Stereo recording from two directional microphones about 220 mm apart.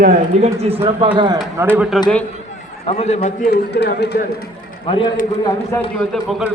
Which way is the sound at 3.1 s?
45° left (ahead or behind).